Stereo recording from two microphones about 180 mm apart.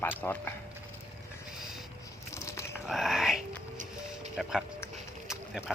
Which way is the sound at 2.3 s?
15° left (ahead or behind).